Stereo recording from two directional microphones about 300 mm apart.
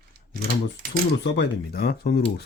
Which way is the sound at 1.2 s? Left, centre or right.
Left.